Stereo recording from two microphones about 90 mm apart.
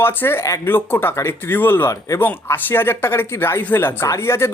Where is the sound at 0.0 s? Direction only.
25° left (ahead or behind).